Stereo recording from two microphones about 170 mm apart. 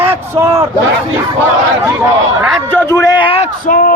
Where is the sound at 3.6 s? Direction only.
55° left (ahead or behind).